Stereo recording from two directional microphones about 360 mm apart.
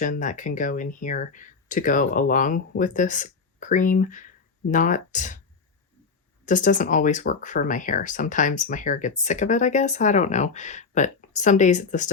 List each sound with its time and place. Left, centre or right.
0.0 s speech: left
6.4 s speech: left